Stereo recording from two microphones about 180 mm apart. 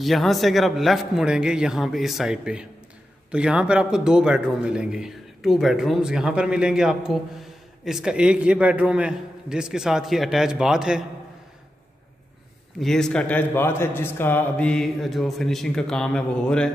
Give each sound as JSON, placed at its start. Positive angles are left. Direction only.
{"t": 0.0, "sound": "speech", "side_deg": 0}
{"t": 12.8, "sound": "speech", "side_deg": 5}